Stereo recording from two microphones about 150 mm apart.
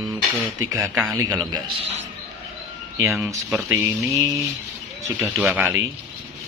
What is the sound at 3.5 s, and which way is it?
Speech, centre (ahead or behind).